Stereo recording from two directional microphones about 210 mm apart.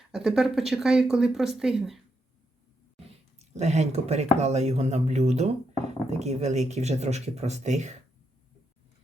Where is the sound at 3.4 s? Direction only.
30° right (ahead or behind).